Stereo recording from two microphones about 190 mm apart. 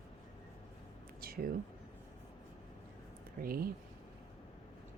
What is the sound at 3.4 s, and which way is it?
Speech, 50° right (ahead or behind).